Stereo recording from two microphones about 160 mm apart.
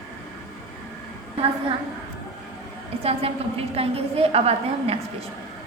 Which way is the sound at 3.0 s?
40° right (ahead or behind).